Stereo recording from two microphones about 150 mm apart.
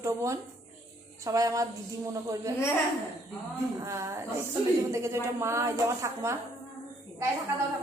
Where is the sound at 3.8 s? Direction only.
20° right (ahead or behind).